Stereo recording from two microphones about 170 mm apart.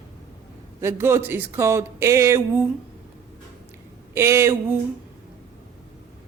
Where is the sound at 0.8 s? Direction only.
15° right (ahead or behind).